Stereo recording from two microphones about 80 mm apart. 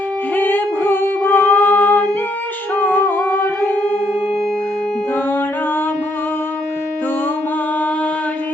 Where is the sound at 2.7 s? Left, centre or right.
Left.